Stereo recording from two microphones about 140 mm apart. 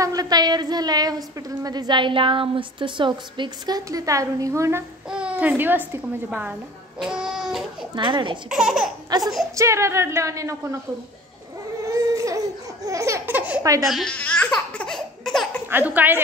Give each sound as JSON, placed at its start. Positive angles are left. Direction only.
{"t": 0.0, "sound": "a woman's voice", "side_deg": -25}
{"t": 5.1, "sound": "speech", "side_deg": -10}
{"t": 7.9, "sound": "a child's voice", "side_deg": -35}
{"t": 8.5, "sound": "speech", "side_deg": -5}
{"t": 9.6, "sound": "a woman's voice", "side_deg": -20}
{"t": 11.9, "sound": "laughter", "side_deg": -25}
{"t": 13.4, "sound": "speech", "side_deg": -10}
{"t": 13.8, "sound": "speech", "side_deg": 0}
{"t": 14.1, "sound": "laughter", "side_deg": 10}
{"t": 15.7, "sound": "speech", "side_deg": -10}